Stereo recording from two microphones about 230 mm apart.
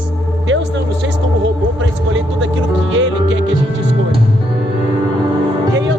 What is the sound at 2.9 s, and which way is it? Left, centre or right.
Music, right.